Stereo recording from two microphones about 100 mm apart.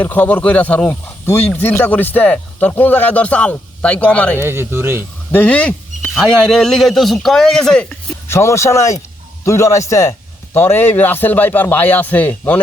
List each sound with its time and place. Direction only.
0.0 s speech: 15° left (ahead or behind)
4.4 s speech: 25° right (ahead or behind)
5.3 s a man's voice: 15° left (ahead or behind)
8.3 s a man's voice: 30° left (ahead or behind)